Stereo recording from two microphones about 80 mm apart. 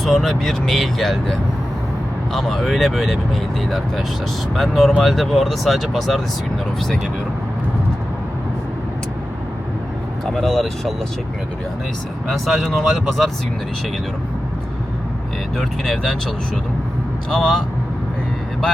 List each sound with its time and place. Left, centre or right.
0.0 s speech: centre
10.3 s speech: centre
12.6 s speech: centre
15.5 s speech: centre
17.3 s speech: centre